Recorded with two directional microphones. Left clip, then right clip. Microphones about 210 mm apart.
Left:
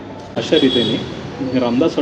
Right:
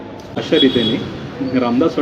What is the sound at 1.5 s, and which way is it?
Speech, 10° right (ahead or behind).